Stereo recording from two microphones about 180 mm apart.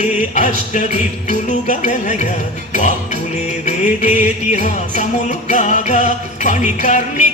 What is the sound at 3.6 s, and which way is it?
Music, 45° left (ahead or behind).